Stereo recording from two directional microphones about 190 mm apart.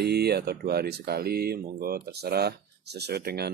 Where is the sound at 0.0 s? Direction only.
60° right (ahead or behind).